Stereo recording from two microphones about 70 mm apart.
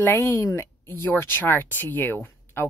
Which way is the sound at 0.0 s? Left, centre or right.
Left.